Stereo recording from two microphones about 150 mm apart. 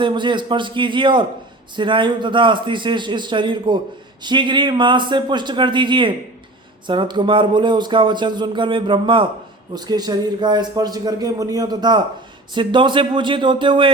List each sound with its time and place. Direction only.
0.0 s a man's voice: 35° right (ahead or behind)